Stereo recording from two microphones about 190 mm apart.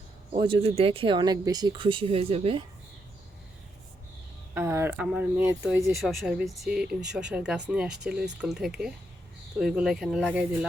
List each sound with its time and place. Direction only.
0.3 s speech: 30° right (ahead or behind)
4.5 s speech: 15° right (ahead or behind)